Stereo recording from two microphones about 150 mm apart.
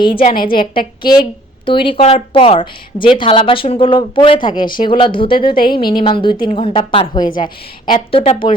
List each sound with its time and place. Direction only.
0.0 s a woman's voice: 35° left (ahead or behind)
5.5 s a woman's voice: 75° left (ahead or behind)
6.0 s a woman's voice: 35° left (ahead or behind)